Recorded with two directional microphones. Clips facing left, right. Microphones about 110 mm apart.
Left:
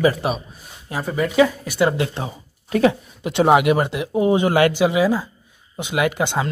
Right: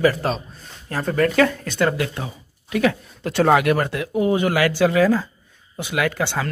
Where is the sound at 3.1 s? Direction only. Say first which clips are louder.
Left 2 dB; 15° left (ahead or behind).